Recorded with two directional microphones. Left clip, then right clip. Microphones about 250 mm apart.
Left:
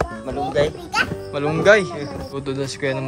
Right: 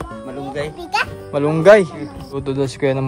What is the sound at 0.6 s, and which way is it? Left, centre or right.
Speech, centre.